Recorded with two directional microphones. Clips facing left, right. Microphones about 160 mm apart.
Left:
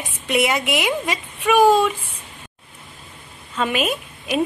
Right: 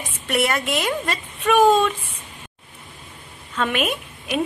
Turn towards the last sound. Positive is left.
turn(degrees=0)  # may be behind; listen again after turning